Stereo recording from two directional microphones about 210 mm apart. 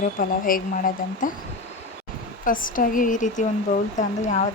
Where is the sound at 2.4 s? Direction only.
40° left (ahead or behind).